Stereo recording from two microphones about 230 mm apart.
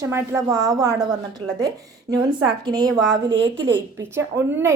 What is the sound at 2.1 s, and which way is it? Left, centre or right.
Speech, centre.